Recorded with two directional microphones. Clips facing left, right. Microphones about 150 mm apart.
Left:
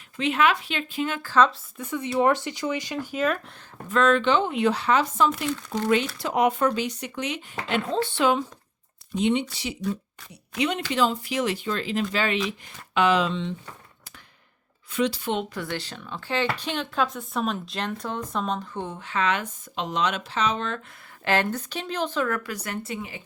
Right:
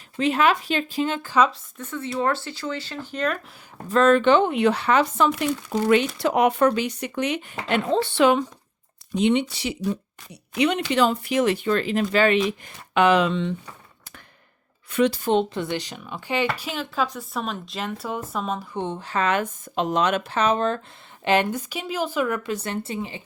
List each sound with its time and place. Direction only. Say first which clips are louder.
0.2 s speech: right 2 dB; 40° right (ahead or behind)
1.8 s speech: left 3 dB; 15° left (ahead or behind)
3.8 s speech: right 4 dB; 40° right (ahead or behind); by 7.4 s 60° right (ahead or behind)
7.7 s speech: right 4 dB; 70° right (ahead or behind)
14.8 s speech: right 4 dB; 60° right (ahead or behind)
15.3 s speech: right 7 dB; 30° right (ahead or behind)
15.7 s speech: right 3 dB; 15° right (ahead or behind)
16.6 s speech: even; 5° right (ahead or behind)
18.9 s speech: right 2 dB; 35° right (ahead or behind)
21.2 s speech: right 3 dB; 15° right (ahead or behind)